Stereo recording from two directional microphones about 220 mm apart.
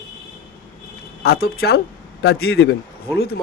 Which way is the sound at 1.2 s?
45° left (ahead or behind).